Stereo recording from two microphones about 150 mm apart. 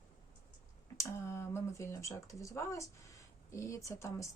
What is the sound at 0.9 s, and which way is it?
Speech, 15° left (ahead or behind).